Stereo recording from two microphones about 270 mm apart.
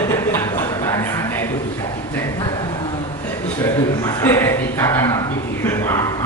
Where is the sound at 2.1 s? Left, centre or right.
Centre.